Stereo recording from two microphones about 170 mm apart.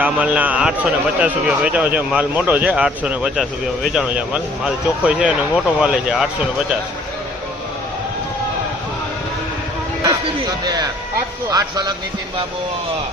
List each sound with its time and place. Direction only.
0.0 s a man's voice: 10° right (ahead or behind)
11.5 s speech: 25° right (ahead or behind)